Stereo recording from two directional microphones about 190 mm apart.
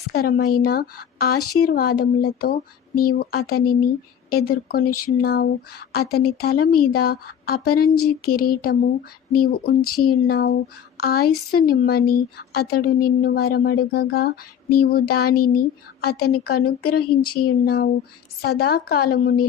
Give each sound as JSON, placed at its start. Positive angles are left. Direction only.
{"t": 0.1, "sound": "a woman's voice", "side_deg": 55}